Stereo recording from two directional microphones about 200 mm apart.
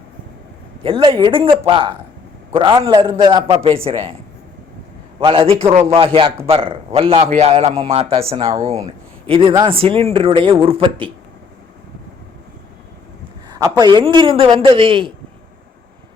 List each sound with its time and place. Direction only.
0.8 s a man's voice: 25° right (ahead or behind)
5.2 s a man's voice: 25° right (ahead or behind)
8.5 s speech: 15° right (ahead or behind)
9.2 s a man's voice: 25° right (ahead or behind)
13.5 s a man's voice: 20° right (ahead or behind)